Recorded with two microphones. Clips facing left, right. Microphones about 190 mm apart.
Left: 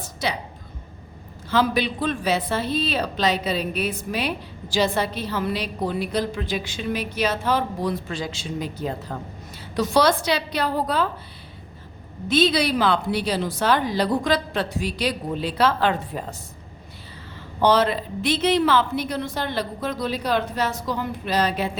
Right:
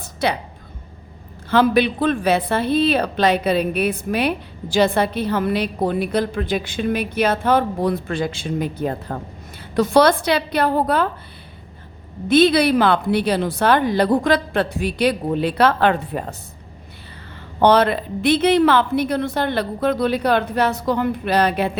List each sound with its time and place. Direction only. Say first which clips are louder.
0.0 s a sound: right 6 dB; 60° right (ahead or behind)
1.5 s speech: right 6 dB; 60° right (ahead or behind)
12.3 s speech: right 6 dB; 55° right (ahead or behind)
17.6 s speech: right 4 dB; 60° right (ahead or behind)